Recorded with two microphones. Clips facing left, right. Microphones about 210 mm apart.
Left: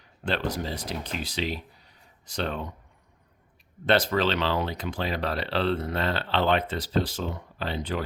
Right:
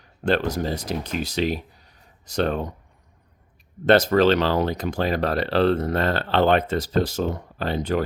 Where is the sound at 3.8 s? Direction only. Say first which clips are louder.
Right 7 dB; 45° right (ahead or behind).